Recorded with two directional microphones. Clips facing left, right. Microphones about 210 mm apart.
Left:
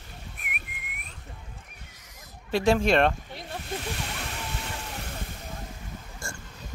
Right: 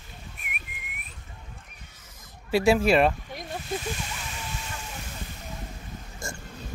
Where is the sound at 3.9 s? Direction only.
60° left (ahead or behind).